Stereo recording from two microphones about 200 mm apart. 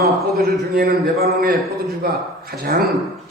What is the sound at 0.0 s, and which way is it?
A man's voice, 50° right (ahead or behind).